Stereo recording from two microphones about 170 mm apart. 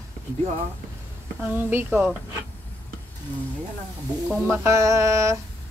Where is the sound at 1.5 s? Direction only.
10° right (ahead or behind).